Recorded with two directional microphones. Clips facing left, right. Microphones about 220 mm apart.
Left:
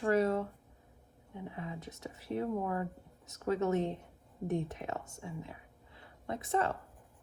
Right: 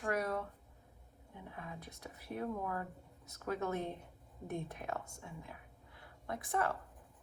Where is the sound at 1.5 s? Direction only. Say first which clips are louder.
Left 4 dB; 25° left (ahead or behind).